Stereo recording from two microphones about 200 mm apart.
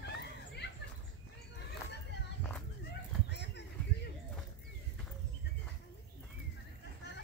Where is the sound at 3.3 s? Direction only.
60° left (ahead or behind).